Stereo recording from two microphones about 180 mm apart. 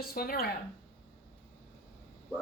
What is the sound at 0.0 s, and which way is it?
Speech, 60° left (ahead or behind).